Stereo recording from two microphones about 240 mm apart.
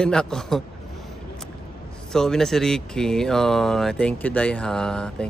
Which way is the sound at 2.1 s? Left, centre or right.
Centre.